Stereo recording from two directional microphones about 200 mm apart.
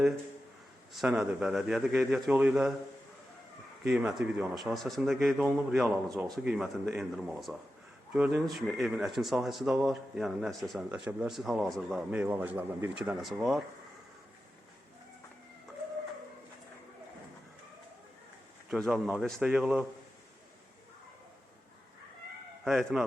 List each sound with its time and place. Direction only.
0.9 s speech: 5° right (ahead or behind)
3.9 s speech: 5° right (ahead or behind)
6.1 s speech: 15° right (ahead or behind)
6.5 s speech: 5° right (ahead or behind)
18.7 s speech: centre (ahead or behind)
22.6 s speech: centre (ahead or behind)